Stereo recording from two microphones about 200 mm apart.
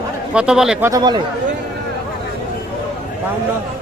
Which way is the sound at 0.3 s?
5° right (ahead or behind).